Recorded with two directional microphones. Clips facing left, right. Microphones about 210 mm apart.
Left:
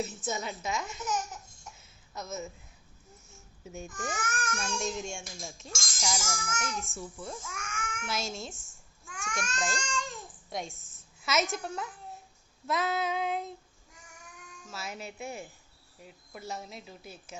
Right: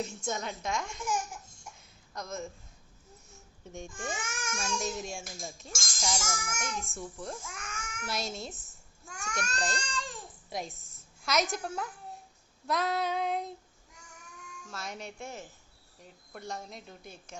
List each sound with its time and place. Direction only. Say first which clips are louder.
0.0 s speech: left 1 dB; 5° left (ahead or behind)
1.7 s a sound: even; 5° left (ahead or behind)
3.8 s a child's voice: left 2 dB; 25° right (ahead or behind)
4.6 s speech: right 1 dB; 5° right (ahead or behind)
7.5 s a sound: left 4 dB; 35° right (ahead or behind)
8.0 s speech: right 1 dB; centre (ahead or behind)
9.0 s babbling: even; 40° right (ahead or behind)
10.5 s a woman's voice: even; centre (ahead or behind)
14.7 s speech: left 1 dB; 5° left (ahead or behind)